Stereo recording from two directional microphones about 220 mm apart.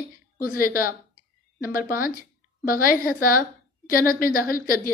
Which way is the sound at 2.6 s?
40° left (ahead or behind).